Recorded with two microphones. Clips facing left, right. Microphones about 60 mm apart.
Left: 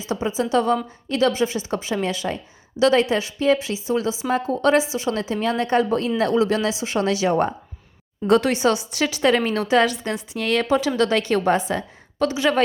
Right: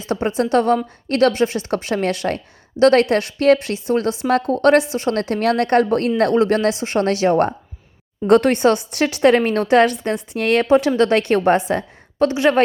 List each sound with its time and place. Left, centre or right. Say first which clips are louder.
0.0 s a woman's voice: right 4 dB; right